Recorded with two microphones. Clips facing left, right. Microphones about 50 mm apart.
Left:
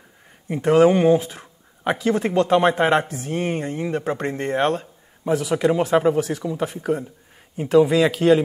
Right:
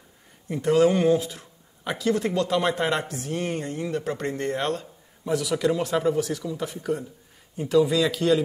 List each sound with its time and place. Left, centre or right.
0.5 s speech: left